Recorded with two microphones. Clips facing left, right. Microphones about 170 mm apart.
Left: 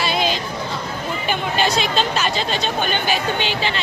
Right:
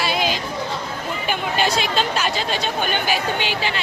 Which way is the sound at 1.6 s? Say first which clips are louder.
Left 1 dB; 10° right (ahead or behind).